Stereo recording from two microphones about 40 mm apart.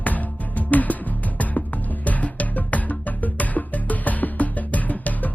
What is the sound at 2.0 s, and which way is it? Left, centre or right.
Music, left.